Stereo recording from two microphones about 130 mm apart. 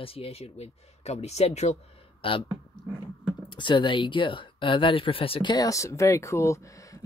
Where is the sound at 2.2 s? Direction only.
40° left (ahead or behind).